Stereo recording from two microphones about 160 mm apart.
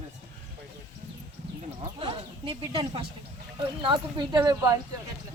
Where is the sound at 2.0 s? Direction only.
30° right (ahead or behind).